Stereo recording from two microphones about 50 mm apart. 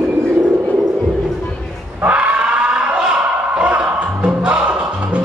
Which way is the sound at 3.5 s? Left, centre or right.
Right.